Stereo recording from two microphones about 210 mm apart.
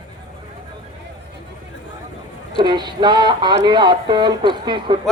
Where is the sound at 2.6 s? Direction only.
20° right (ahead or behind).